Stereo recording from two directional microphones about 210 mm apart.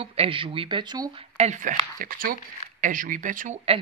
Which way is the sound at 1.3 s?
35° right (ahead or behind).